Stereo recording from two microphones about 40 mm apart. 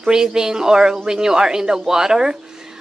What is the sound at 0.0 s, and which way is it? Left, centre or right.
A man's voice, centre.